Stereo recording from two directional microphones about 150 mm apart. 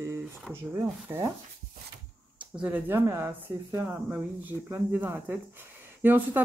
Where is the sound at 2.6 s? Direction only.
15° right (ahead or behind).